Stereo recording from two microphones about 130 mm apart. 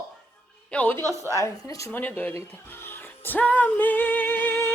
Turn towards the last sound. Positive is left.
turn(degrees=15)  # may be behind; listen again after turning